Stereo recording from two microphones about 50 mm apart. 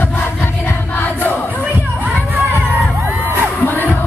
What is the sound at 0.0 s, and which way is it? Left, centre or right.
Music, left.